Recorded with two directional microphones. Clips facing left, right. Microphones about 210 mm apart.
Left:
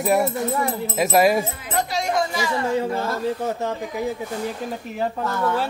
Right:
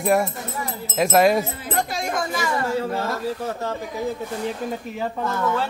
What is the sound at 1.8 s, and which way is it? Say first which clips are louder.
Speech: left 3 dB; 50° right (ahead or behind).